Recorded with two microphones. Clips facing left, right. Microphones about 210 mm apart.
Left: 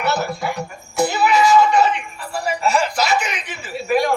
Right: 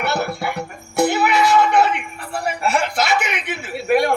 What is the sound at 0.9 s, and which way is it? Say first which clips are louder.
Music: even; 60° right (ahead or behind).